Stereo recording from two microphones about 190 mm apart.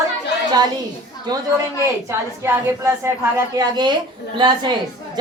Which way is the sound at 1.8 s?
15° right (ahead or behind).